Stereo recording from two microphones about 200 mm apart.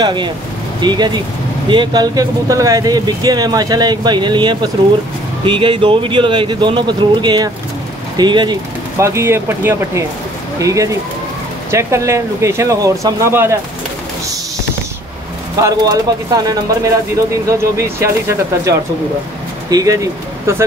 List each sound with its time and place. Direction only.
0.0 s speech: 20° right (ahead or behind)
15.6 s speech: 20° right (ahead or behind)
19.7 s speech: 15° right (ahead or behind)